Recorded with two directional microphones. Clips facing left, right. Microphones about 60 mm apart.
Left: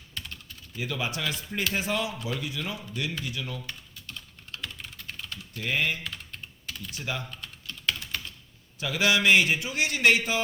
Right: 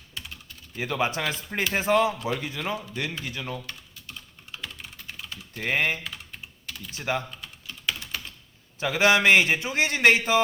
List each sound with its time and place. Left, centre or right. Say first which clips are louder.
0.1 s typing: even; centre
0.8 s a man's voice: right 5 dB; right
3.7 s typing: even; centre
5.5 s a man's voice: right 3 dB; right
6.0 s typing: even; centre
6.9 s a man's voice: right 6 dB; right
7.3 s typing: even; centre
8.8 s a man's voice: right 4 dB; right